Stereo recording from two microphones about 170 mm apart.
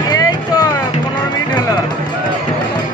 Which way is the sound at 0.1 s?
20° left (ahead or behind).